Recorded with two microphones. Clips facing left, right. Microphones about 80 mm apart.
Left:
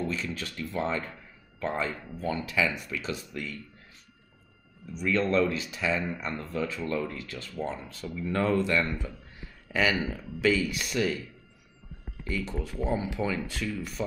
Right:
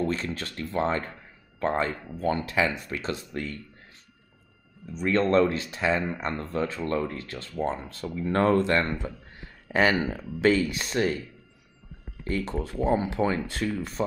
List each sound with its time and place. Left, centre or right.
0.0 s speech: right
5.0 s speech: right
10.7 s speech: right
12.3 s speech: right